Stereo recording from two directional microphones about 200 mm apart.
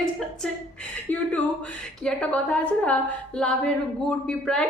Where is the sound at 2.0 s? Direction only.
5° left (ahead or behind).